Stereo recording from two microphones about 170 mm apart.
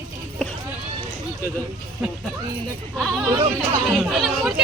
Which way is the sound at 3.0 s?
5° right (ahead or behind).